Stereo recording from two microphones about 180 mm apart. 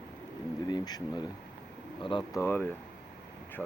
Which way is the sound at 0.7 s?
25° left (ahead or behind).